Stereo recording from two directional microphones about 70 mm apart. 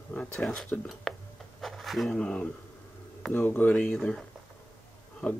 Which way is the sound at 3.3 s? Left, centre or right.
Left.